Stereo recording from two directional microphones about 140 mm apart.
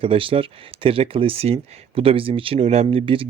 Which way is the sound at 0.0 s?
40° right (ahead or behind).